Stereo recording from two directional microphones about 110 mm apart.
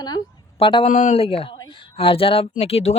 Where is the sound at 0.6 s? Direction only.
50° left (ahead or behind).